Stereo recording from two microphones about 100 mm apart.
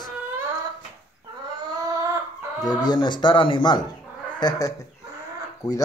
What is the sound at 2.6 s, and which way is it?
Speech, 45° left (ahead or behind).